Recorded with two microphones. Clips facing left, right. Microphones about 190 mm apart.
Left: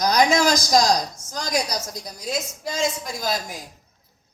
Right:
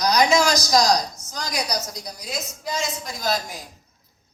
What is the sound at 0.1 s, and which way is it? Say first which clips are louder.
Speech: even; 50° left (ahead or behind).